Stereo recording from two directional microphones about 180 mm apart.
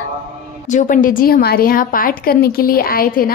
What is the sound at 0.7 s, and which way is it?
A woman's voice, 45° left (ahead or behind).